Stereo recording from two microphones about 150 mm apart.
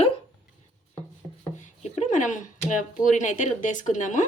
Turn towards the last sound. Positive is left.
turn(degrees=55)  # may be behind; listen again after turning